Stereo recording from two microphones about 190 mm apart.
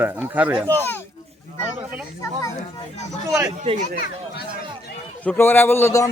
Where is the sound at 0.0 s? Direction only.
10° right (ahead or behind).